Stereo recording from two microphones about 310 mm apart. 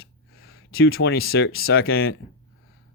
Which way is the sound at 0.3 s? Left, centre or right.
Left.